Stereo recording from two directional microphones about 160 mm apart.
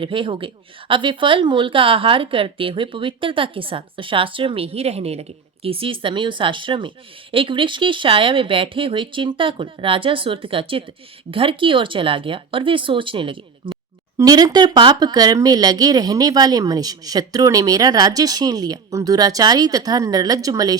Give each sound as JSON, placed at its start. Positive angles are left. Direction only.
{"t": 0.0, "sound": "speech", "side_deg": -30}